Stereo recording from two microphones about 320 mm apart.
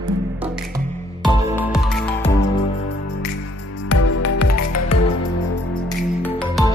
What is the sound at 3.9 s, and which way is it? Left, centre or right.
Music, left.